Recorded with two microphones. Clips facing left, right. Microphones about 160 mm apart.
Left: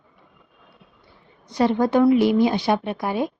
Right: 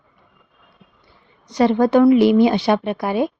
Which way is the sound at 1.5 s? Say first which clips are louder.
Right 4 dB; 85° right.